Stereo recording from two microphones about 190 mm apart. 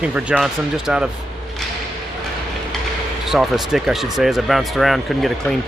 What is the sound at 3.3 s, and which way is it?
Speech, centre (ahead or behind).